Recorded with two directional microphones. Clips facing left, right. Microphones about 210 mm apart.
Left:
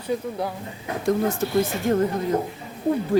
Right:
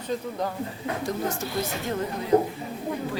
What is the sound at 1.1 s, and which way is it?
Speech, 55° left (ahead or behind).